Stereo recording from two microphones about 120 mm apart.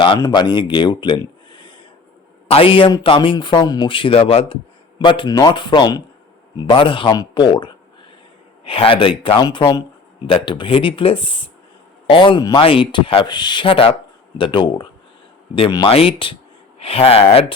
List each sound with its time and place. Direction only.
0.2 s speech: 35° left (ahead or behind)
2.5 s speech: 50° left (ahead or behind)
3.9 s speech: 50° left (ahead or behind)
4.9 s speech: 40° left (ahead or behind)
15.9 s speech: 50° left (ahead or behind)